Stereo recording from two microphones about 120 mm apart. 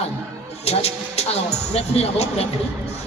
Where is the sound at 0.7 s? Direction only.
60° left (ahead or behind).